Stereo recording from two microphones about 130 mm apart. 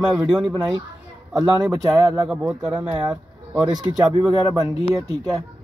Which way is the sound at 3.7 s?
30° right (ahead or behind).